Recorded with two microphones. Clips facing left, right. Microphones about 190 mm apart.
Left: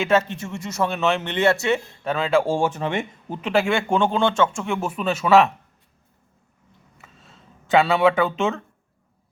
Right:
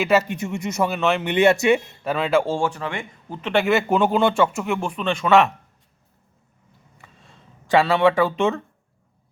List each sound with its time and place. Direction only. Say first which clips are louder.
0.0 s speech: right 1 dB; 5° right (ahead or behind)
0.9 s speech: left 1 dB; centre (ahead or behind)
1.2 s speech: right 3 dB; 15° right (ahead or behind)
2.0 s speech: even; centre (ahead or behind)
2.5 s speech: left 2 dB; 20° left (ahead or behind)
3.4 s speech: right 1 dB; centre (ahead or behind)
7.0 s a sound: even; centre (ahead or behind)